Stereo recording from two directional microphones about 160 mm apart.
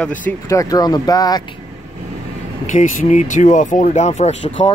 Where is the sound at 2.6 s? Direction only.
50° left (ahead or behind).